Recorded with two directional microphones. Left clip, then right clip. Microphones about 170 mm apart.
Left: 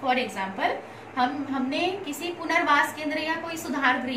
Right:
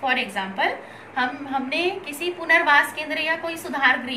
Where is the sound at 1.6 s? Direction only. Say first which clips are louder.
Right 1 dB; 30° right (ahead or behind).